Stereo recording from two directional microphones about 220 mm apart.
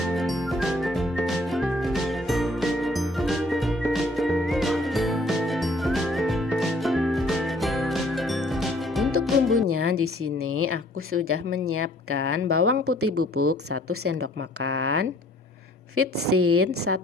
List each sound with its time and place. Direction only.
0.1 s music: centre (ahead or behind)
9.6 s music: 80° right
10.4 s a woman's voice: 80° right
16.3 s a woman's voice: 90° right